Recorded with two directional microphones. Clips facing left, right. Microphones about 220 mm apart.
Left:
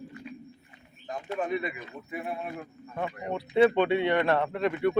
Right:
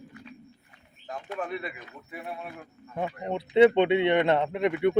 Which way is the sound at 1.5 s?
Centre (ahead or behind).